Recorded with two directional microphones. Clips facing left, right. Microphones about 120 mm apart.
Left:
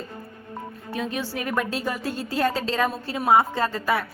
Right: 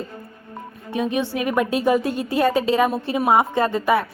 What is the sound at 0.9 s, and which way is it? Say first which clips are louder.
A woman's voice: right 7 dB; 20° right (ahead or behind).